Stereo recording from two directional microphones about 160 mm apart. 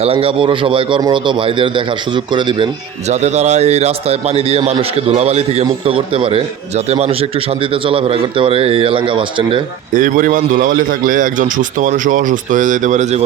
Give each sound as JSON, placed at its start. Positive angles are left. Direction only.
{"t": 0.0, "sound": "speech", "side_deg": -35}
{"t": 3.1, "sound": "speech", "side_deg": -45}
{"t": 9.9, "sound": "a man's voice", "side_deg": -55}